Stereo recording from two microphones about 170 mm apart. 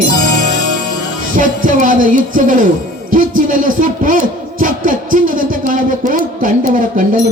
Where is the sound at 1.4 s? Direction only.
50° right (ahead or behind).